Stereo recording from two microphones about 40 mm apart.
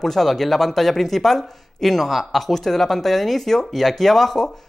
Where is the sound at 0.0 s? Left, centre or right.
Centre.